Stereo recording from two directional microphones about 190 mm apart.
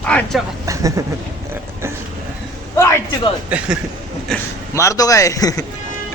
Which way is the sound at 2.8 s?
15° left (ahead or behind).